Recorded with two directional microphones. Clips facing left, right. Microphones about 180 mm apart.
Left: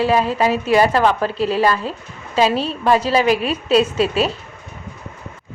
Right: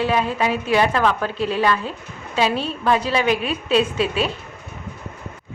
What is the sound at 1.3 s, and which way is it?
A woman's voice, 35° left (ahead or behind).